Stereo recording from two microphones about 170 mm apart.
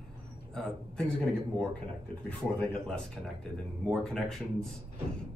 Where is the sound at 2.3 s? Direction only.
5° left (ahead or behind).